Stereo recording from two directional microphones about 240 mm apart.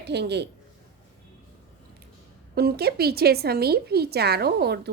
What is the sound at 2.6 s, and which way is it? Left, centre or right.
Speech, right.